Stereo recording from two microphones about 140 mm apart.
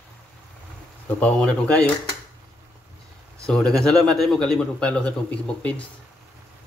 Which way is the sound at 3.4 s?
5° left (ahead or behind).